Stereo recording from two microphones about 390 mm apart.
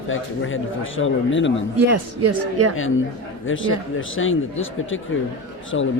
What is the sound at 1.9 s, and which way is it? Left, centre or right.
Speech, right.